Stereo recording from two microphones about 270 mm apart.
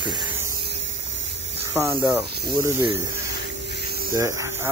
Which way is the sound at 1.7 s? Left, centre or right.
Centre.